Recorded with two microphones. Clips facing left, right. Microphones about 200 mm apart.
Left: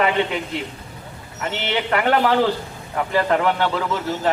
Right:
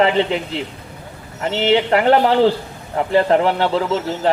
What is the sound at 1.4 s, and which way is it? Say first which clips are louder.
A man's voice: right 8 dB; 30° right (ahead or behind).